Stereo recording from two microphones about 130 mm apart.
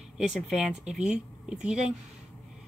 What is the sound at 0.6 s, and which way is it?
Speech, 5° right (ahead or behind).